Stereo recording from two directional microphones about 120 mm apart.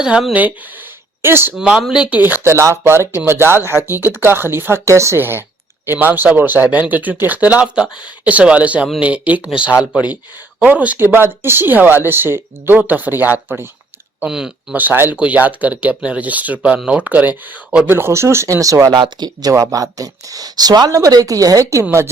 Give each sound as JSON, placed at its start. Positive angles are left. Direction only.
{"t": 0.0, "sound": "speech", "side_deg": -5}
{"t": 0.4, "sound": "speech", "side_deg": -15}
{"t": 1.5, "sound": "speech", "side_deg": -5}
{"t": 2.2, "sound": "speech", "side_deg": -20}
{"t": 14.2, "sound": "speech", "side_deg": -5}